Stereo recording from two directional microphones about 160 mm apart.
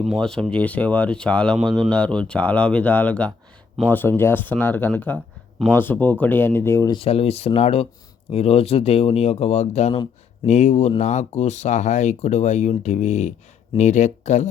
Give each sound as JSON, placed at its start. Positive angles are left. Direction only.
{"t": 0.0, "sound": "speech", "side_deg": 0}
{"t": 6.9, "sound": "speech", "side_deg": 35}